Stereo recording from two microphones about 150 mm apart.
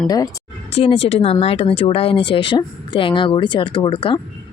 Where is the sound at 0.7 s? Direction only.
40° left (ahead or behind).